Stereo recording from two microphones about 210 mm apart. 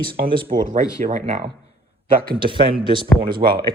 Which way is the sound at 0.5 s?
40° right (ahead or behind).